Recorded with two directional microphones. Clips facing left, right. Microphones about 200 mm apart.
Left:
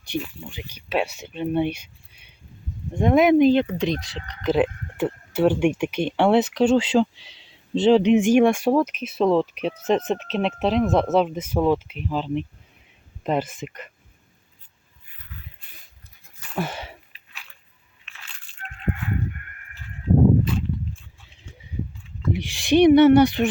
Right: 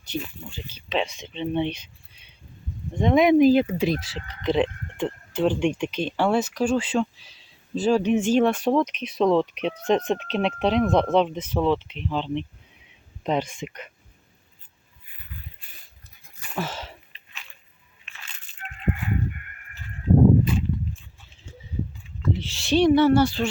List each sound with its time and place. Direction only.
0.1 s speech: 15° left (ahead or behind)
2.9 s speech: 5° left (ahead or behind)
16.6 s a sound: 10° left (ahead or behind)
18.1 s crushing: centre (ahead or behind)
22.3 s speech: 15° left (ahead or behind)